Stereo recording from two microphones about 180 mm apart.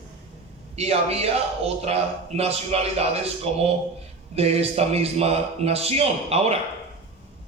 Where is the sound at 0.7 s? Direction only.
35° right (ahead or behind).